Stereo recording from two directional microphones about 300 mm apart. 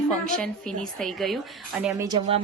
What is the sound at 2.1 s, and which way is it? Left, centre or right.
Speech, centre.